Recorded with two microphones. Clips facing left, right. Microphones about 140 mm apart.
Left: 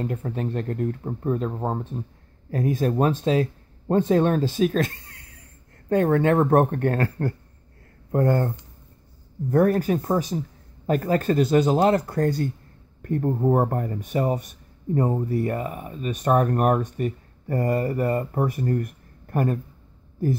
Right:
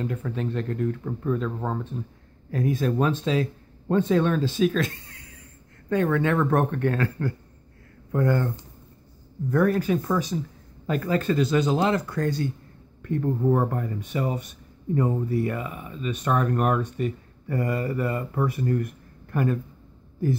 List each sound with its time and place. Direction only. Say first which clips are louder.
0.0 s speech: left 1 dB; 40° left (ahead or behind)